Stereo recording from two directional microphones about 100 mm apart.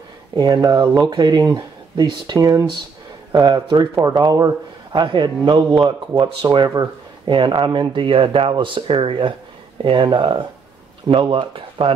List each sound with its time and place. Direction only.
0.4 s speech: 45° right (ahead or behind)
5.0 s speech: 50° right (ahead or behind)